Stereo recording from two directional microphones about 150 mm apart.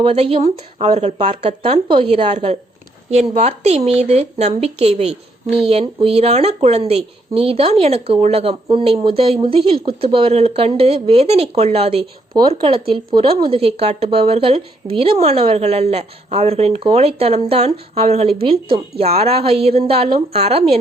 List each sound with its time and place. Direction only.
0.0 s speech: 40° right (ahead or behind)
12.3 s speech: 30° right (ahead or behind)